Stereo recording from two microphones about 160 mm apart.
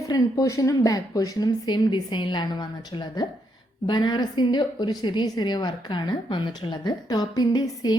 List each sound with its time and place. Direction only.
0.1 s a woman's voice: 25° left (ahead or behind)